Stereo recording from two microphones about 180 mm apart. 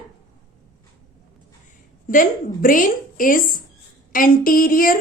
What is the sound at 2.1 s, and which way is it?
A woman's voice, 50° left (ahead or behind).